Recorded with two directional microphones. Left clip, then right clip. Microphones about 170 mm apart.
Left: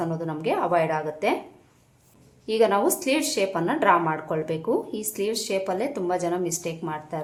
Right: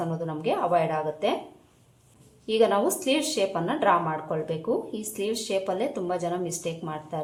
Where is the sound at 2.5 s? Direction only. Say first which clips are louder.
Left 1 dB; 10° left (ahead or behind).